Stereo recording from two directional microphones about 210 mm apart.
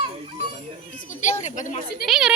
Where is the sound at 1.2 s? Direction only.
35° left (ahead or behind).